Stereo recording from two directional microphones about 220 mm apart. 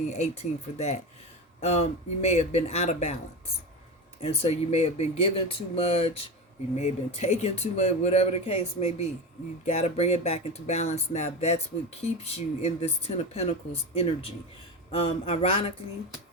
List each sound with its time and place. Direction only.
0.1 s speech: 30° left (ahead or behind)
4.2 s speech: 30° left (ahead or behind)